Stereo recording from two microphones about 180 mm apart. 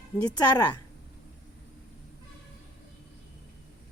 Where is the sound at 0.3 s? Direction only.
20° left (ahead or behind).